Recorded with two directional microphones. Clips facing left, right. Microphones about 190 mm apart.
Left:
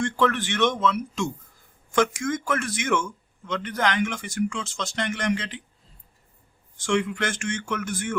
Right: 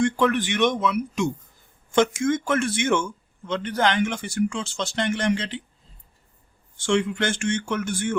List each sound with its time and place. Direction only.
0.0 s speech: 15° right (ahead or behind)
6.7 s speech: 30° right (ahead or behind)